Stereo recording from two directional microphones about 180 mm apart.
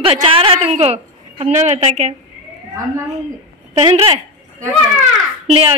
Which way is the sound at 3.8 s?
30° right (ahead or behind).